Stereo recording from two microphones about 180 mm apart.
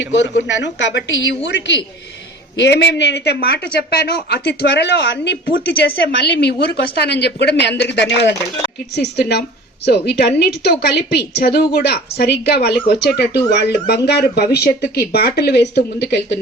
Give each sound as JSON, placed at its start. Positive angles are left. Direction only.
{"t": 0.0, "sound": "a man's voice", "side_deg": 90}